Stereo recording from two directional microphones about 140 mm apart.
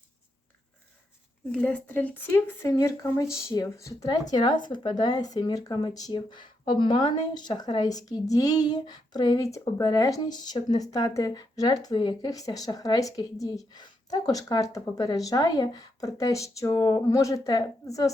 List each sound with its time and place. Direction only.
1.6 s speech: 10° left (ahead or behind)